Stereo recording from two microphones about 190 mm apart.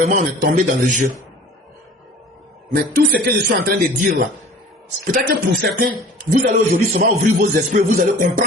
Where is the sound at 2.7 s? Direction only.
50° right (ahead or behind).